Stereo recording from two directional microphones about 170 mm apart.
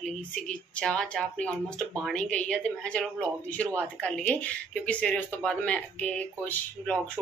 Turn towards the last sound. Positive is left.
turn(degrees=10)  # may be behind; listen again after turning